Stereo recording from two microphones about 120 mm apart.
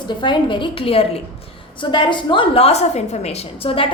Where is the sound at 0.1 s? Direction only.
40° left (ahead or behind).